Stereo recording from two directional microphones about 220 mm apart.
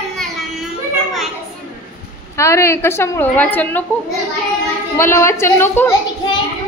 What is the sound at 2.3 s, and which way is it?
A woman's voice, 10° left (ahead or behind).